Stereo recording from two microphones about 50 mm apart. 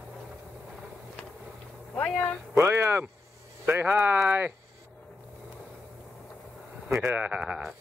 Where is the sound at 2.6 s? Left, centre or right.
Right.